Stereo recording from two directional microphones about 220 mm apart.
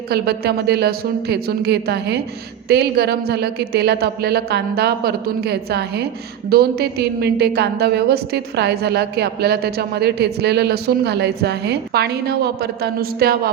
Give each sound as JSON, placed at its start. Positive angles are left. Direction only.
{"t": 0.1, "sound": "a woman's voice", "side_deg": -45}